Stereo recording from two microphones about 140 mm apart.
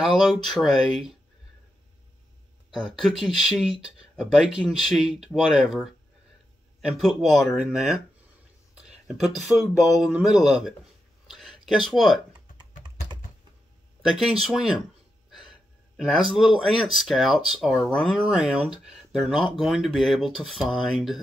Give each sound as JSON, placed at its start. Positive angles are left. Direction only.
{"t": 0.0, "sound": "speech", "side_deg": 0}
{"t": 2.7, "sound": "speech", "side_deg": 0}
{"t": 7.0, "sound": "speech", "side_deg": 0}
{"t": 11.2, "sound": "a sound", "side_deg": 0}
{"t": 14.0, "sound": "speech", "side_deg": 0}
{"t": 16.0, "sound": "speech", "side_deg": -5}